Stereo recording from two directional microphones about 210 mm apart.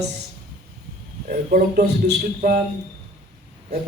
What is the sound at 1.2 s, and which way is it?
A man's voice, 40° right (ahead or behind).